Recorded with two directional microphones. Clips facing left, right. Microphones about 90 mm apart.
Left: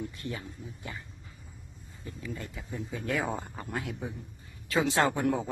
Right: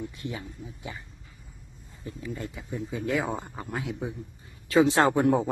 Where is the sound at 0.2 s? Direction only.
15° right (ahead or behind).